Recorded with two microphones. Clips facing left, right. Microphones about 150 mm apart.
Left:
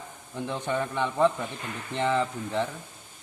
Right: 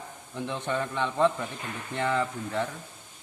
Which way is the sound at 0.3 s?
10° left (ahead or behind).